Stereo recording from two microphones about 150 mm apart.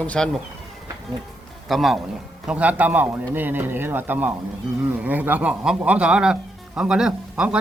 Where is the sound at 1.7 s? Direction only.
Centre (ahead or behind).